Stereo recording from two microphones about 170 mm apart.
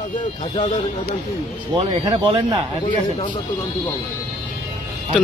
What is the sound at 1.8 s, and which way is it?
Speech, 30° right (ahead or behind).